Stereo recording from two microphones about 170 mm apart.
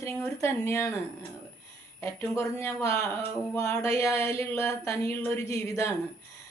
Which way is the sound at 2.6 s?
15° left (ahead or behind).